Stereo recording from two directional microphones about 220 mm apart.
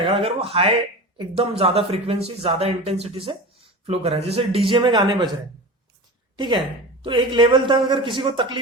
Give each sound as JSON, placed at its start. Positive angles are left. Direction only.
{"t": 0.0, "sound": "speech", "side_deg": -25}
{"t": 6.3, "sound": "speech", "side_deg": -20}